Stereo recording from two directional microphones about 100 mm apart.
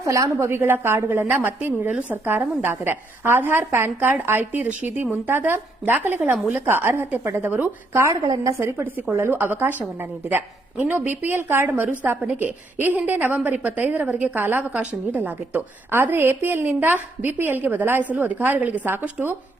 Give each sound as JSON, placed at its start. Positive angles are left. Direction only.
{"t": 0.0, "sound": "a woman's voice", "side_deg": -30}
{"t": 8.6, "sound": "a woman's voice", "side_deg": -20}